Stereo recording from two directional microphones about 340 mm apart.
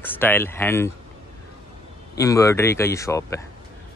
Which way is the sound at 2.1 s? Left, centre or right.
Centre.